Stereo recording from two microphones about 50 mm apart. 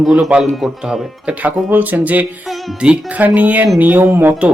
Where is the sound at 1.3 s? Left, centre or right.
Right.